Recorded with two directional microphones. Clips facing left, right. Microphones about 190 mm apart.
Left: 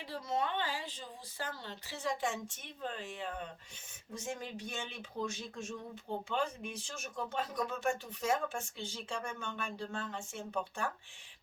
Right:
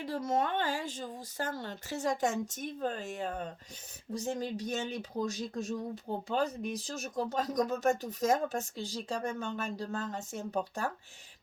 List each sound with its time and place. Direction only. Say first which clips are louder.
0.0 s speech: right 5 dB; 45° right (ahead or behind)